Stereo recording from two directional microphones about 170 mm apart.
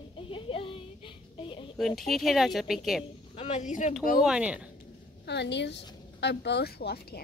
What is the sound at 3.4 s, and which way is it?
Speech, 45° left (ahead or behind).